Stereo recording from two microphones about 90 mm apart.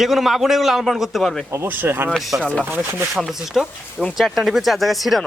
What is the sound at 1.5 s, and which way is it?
Speech, 25° right (ahead or behind).